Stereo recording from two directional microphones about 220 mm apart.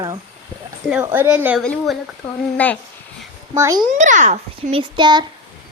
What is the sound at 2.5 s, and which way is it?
Speech, 5° left (ahead or behind).